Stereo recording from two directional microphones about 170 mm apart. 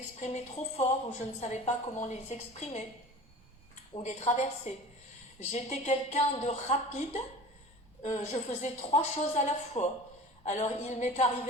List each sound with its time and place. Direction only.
0.2 s a woman's voice: 40° left (ahead or behind)
3.9 s a woman's voice: 40° left (ahead or behind)